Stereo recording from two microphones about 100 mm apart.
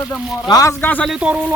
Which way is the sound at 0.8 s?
15° left (ahead or behind).